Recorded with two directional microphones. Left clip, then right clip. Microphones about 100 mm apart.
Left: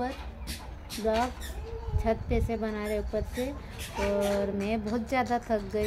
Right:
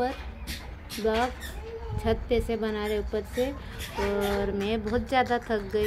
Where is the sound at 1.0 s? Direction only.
50° right (ahead or behind).